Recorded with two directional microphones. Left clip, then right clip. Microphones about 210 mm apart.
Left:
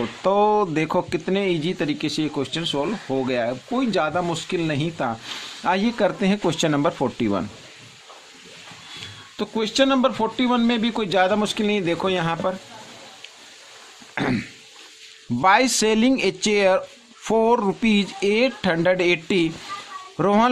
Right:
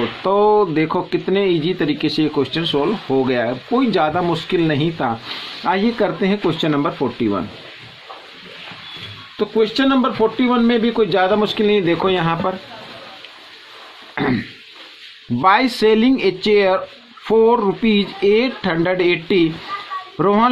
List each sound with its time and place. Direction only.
0.2 s speech: 35° left (ahead or behind)
5.6 s speech: 35° left (ahead or behind)
9.4 s speech: 40° left (ahead or behind)
14.1 s a sound: 30° left (ahead or behind)
15.4 s speech: 35° left (ahead or behind)